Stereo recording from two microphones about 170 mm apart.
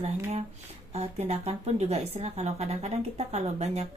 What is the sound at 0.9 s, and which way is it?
A woman's voice, 40° right (ahead or behind).